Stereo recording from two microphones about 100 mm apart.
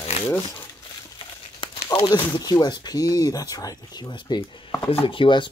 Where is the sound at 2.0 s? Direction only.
50° left (ahead or behind).